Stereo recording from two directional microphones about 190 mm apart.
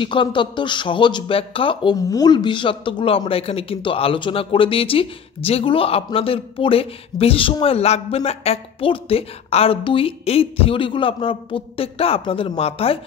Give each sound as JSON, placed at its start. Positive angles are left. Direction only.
{"t": 0.0, "sound": "speech", "side_deg": 25}